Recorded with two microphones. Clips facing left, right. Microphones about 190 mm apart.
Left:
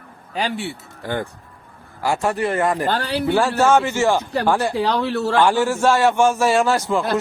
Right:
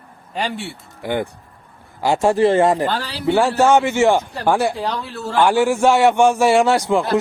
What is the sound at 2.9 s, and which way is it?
Speech, 55° left (ahead or behind).